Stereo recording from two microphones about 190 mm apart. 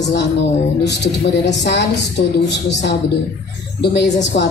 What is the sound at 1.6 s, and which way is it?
Speech, 65° left (ahead or behind).